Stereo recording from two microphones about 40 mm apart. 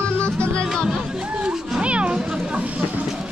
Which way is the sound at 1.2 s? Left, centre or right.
Right.